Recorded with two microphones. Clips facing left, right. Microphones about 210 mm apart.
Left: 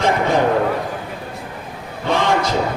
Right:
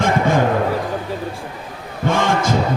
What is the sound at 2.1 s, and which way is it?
Heart sounds, 50° right (ahead or behind).